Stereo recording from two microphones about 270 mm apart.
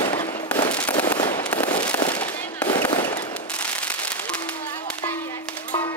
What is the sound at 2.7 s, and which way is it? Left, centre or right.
Fireworks, centre.